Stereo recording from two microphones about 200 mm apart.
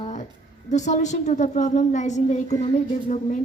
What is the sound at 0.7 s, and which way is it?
A woman's voice, 35° left (ahead or behind).